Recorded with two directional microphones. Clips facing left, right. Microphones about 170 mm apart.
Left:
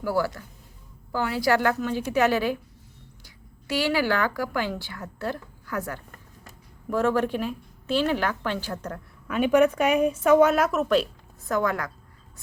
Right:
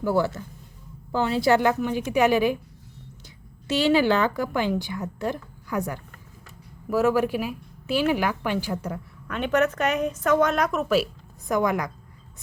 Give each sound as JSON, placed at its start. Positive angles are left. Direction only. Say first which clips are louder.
{"t": 0.0, "sound": "a woman's voice", "louder": "right 3 dB", "side_deg": -25}
{"t": 9.2, "sound": "a woman's voice", "louder": "left 3 dB", "side_deg": 5}
{"t": 11.4, "sound": "a woman's voice", "louder": "right 2 dB", "side_deg": -15}